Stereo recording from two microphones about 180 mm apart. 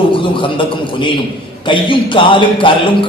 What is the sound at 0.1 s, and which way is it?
Speech, 30° left (ahead or behind).